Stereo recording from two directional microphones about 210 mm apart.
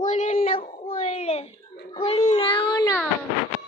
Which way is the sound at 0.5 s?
25° left (ahead or behind).